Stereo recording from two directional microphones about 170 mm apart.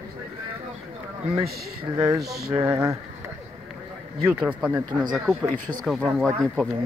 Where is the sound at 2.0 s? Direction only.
15° right (ahead or behind).